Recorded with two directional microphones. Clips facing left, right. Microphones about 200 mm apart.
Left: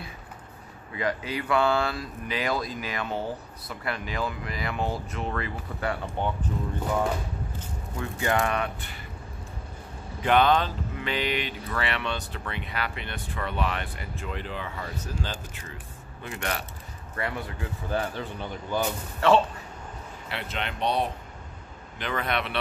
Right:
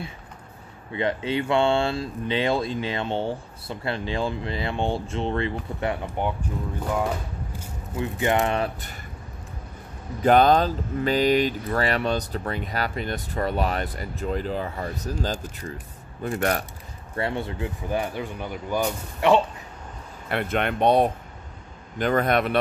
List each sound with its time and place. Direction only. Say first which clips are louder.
0.9 s speech: right 5 dB; 25° right (ahead or behind)
7.5 s a sound: right 4 dB; 10° right (ahead or behind)
8.2 s speech: right 3 dB; 25° right (ahead or behind)
10.2 s speech: right 5 dB; 40° right (ahead or behind)
17.1 s speech: right 5 dB; 25° right (ahead or behind)
17.8 s speech: right 1 dB; 15° right (ahead or behind)
20.2 s speech: right 9 dB; 55° right (ahead or behind)